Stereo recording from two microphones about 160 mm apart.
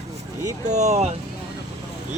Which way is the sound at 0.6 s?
45° right (ahead or behind).